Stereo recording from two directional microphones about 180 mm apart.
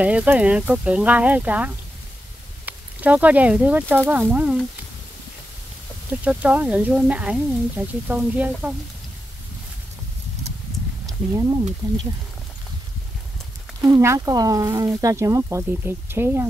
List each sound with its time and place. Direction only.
0.0 s speech: 10° right (ahead or behind)
6.2 s speech: 10° right (ahead or behind)
13.7 s speech: 20° right (ahead or behind)